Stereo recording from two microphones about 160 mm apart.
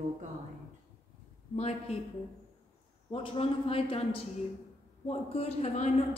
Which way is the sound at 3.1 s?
35° left (ahead or behind).